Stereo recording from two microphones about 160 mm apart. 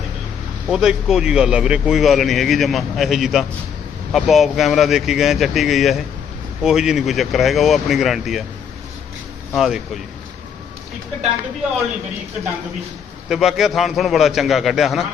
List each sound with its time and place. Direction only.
0.7 s speech: 5° right (ahead or behind)
9.6 s speech: centre (ahead or behind)
13.2 s speech: centre (ahead or behind)